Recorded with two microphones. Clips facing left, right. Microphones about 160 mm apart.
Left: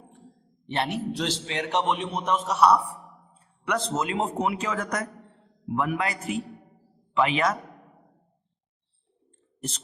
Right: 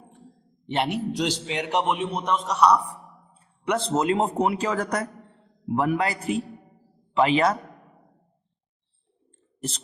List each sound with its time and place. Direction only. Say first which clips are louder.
0.7 s a man's voice: right 2 dB; 15° right (ahead or behind); by 2.7 s 5° left (ahead or behind)
3.7 s a man's voice: right 4 dB; 30° right (ahead or behind)